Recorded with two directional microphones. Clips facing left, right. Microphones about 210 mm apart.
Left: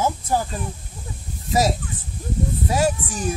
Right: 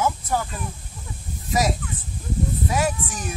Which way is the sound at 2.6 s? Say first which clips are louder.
Left 5 dB; 30° left (ahead or behind).